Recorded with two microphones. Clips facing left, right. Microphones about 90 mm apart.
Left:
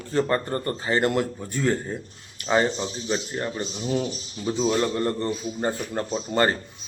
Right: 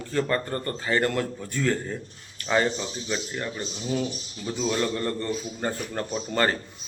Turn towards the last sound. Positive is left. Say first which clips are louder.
# left 2 dB
turn(degrees=20)  # may be behind; listen again after turning